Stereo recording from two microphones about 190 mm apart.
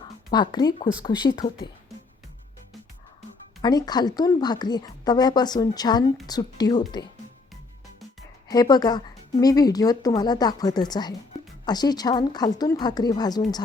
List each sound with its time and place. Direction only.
0.3 s a woman's voice: 20° left (ahead or behind)
3.6 s a woman's voice: 20° left (ahead or behind)
8.4 s a woman's voice: 20° left (ahead or behind)